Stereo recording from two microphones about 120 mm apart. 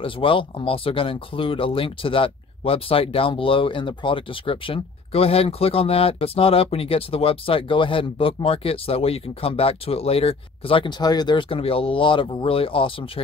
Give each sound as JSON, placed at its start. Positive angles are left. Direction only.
{"t": 0.0, "sound": "speech", "side_deg": 45}